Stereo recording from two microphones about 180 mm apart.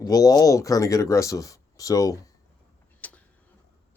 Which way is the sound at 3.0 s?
10° left (ahead or behind).